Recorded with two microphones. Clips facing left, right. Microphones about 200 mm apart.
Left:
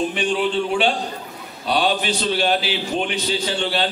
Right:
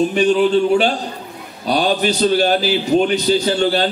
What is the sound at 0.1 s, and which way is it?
A man's voice, 40° right (ahead or behind).